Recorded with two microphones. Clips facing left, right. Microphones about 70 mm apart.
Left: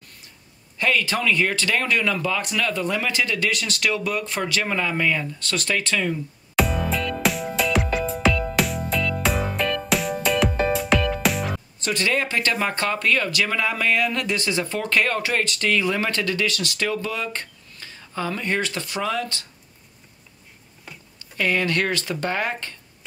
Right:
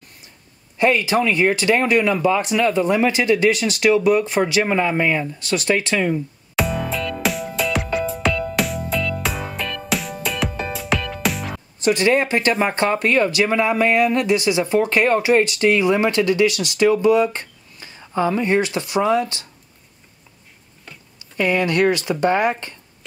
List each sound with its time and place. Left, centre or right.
0.7 s speech: right
6.5 s music: centre
11.8 s speech: right
21.4 s speech: centre